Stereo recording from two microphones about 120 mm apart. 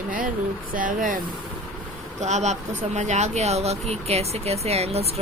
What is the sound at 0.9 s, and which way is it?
Speech, 90° right.